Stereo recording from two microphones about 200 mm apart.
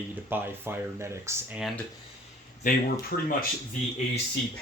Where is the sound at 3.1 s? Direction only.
50° left (ahead or behind).